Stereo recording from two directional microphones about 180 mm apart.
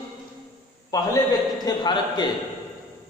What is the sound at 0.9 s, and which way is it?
A man's voice, 20° left (ahead or behind).